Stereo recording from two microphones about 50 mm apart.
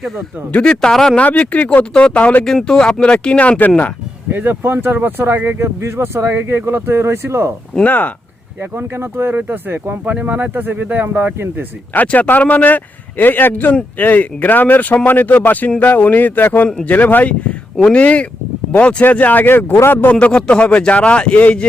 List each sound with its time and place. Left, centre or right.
0.6 s speech: centre
1.1 s a man's voice: left
4.3 s speech: right
5.5 s speech: right
7.9 s a man's voice: left
8.7 s speech: right
9.3 s speech: right
10.1 s speech: right
11.9 s a man's voice: left
17.9 s a man's voice: left
20.1 s a man's voice: left